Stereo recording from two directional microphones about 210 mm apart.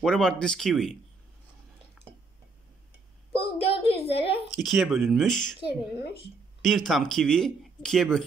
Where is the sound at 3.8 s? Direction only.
30° left (ahead or behind).